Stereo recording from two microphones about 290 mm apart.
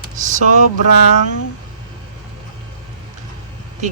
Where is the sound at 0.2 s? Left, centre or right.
Right.